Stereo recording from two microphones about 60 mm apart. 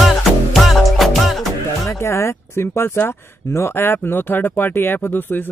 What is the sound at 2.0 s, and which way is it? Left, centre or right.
Speech, left.